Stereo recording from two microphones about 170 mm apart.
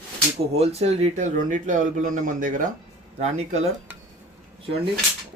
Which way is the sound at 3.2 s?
40° right (ahead or behind).